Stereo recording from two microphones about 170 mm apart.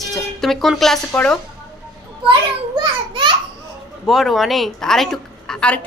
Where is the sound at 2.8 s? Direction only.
25° right (ahead or behind).